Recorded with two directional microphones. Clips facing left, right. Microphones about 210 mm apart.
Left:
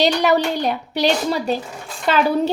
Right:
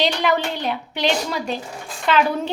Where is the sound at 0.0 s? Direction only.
40° left (ahead or behind).